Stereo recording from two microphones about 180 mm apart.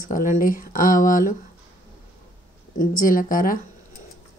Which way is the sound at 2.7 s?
50° left (ahead or behind).